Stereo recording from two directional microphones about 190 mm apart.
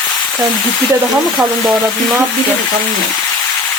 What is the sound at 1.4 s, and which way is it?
Frying, 5° right (ahead or behind).